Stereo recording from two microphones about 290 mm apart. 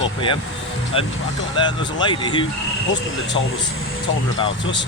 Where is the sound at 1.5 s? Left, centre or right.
Centre.